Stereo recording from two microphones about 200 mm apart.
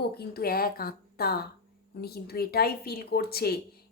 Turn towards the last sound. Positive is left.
turn(degrees=50)  # may be behind; listen again after turning